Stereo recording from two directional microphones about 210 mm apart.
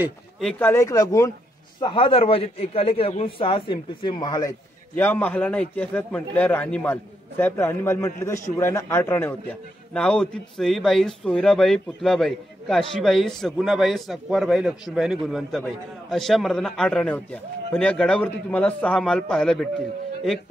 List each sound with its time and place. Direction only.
0.4 s a man's voice: 5° left (ahead or behind)